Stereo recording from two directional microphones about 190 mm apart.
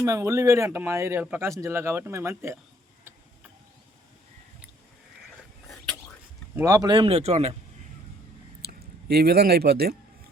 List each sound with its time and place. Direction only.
0.0 s speech: 15° right (ahead or behind)
5.6 s a sound: centre (ahead or behind)
6.6 s speech: 20° right (ahead or behind); by 7.5 s 35° right (ahead or behind)
8.6 s speech: 55° right (ahead or behind)